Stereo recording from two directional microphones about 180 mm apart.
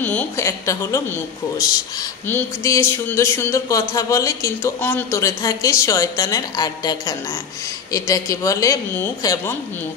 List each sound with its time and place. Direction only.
0.0 s a woman's voice: 10° left (ahead or behind)